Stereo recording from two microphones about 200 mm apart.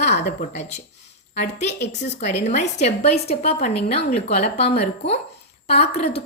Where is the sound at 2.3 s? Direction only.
35° left (ahead or behind).